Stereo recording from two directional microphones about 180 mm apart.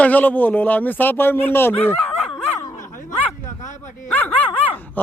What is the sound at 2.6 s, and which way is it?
Dog, 15° left (ahead or behind).